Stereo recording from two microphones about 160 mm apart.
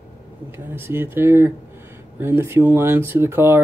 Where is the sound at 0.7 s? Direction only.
15° right (ahead or behind).